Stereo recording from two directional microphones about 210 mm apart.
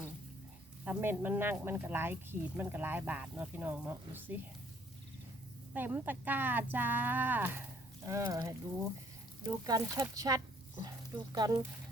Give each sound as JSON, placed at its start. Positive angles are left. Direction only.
{"t": 0.9, "sound": "speech", "side_deg": -10}
{"t": 5.7, "sound": "speech", "side_deg": -10}